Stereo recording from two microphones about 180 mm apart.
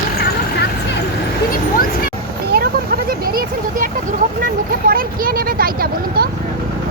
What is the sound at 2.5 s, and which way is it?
Vehicle, 55° right (ahead or behind).